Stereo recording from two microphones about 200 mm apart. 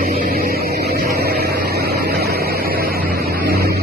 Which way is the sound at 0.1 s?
50° right (ahead or behind).